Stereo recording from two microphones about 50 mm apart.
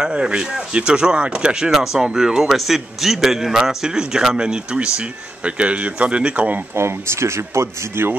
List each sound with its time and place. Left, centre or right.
0.0 s a man's voice: centre
4.7 s speech: right
6.7 s speech: right